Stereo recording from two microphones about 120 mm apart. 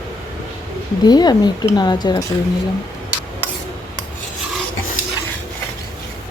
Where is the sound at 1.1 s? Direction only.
35° left (ahead or behind).